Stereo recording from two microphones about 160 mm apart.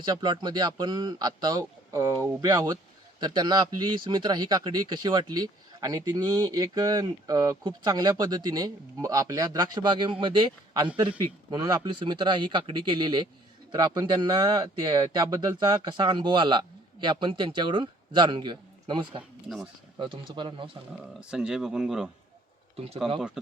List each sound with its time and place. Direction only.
0.0 s a man's voice: 30° right (ahead or behind)
21.2 s speech: 5° right (ahead or behind)